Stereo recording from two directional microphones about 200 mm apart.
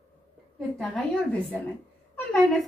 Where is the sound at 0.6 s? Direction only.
Centre (ahead or behind).